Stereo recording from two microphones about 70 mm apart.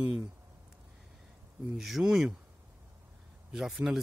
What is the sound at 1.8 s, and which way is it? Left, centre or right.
Speech, centre.